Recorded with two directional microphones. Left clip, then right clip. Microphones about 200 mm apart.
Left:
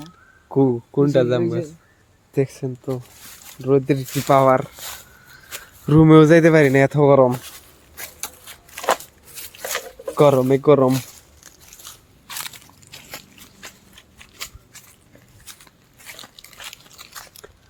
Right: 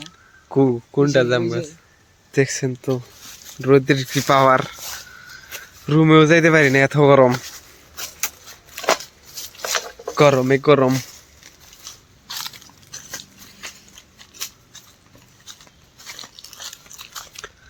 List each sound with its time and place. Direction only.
0.4 s speech: 5° left (ahead or behind)
2.3 s speech: 5° right (ahead or behind)
2.6 s speech: 25° right (ahead or behind)
3.6 s speech: 10° right (ahead or behind)
5.8 s speech: 25° left (ahead or behind); by 7.3 s 5° left (ahead or behind)
7.3 s speech: 15° right (ahead or behind)
8.2 s a sound: centre (ahead or behind)
10.2 s speech: 5° left (ahead or behind)
12.3 s a sound: 5° right (ahead or behind)
16.0 s biting: 5° right (ahead or behind)
17.2 s biting: 10° left (ahead or behind)